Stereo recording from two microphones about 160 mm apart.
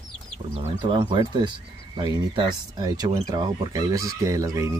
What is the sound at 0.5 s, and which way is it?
Speech, 30° right (ahead or behind).